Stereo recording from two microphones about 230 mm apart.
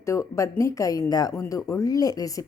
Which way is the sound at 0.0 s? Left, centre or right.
Centre.